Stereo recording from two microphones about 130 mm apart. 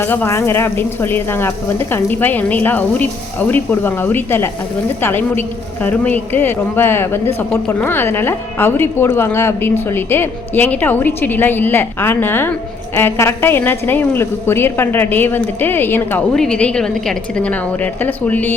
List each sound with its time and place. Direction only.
0.0 s a woman's voice: 15° left (ahead or behind)
16.3 s a woman's voice: 5° left (ahead or behind)